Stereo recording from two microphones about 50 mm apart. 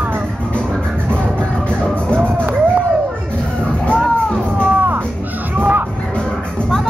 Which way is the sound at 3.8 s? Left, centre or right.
Left.